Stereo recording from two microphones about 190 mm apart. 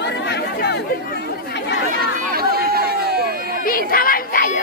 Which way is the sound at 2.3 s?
55° right (ahead or behind).